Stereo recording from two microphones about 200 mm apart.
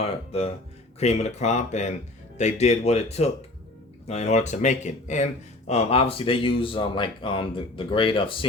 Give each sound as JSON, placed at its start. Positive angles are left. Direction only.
{"t": 0.0, "sound": "speech", "side_deg": 30}